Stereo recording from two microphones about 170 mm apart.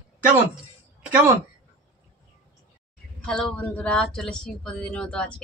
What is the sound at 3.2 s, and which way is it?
Speech, 5° left (ahead or behind).